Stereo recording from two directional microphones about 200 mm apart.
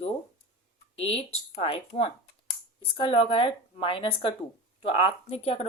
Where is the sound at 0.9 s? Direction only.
30° left (ahead or behind).